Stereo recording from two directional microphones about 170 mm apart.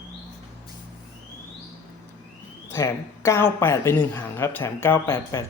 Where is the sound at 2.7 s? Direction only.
15° left (ahead or behind).